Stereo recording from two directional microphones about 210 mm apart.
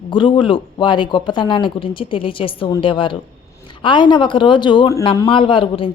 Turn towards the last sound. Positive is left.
turn(degrees=25)  # may be behind; listen again after turning